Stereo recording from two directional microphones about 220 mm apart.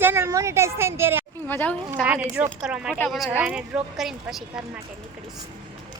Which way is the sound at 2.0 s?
5° right (ahead or behind).